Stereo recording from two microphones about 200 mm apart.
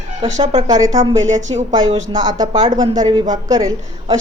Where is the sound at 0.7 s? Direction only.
15° right (ahead or behind).